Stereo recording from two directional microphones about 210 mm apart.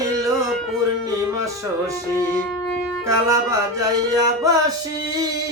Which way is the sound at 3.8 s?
15° right (ahead or behind).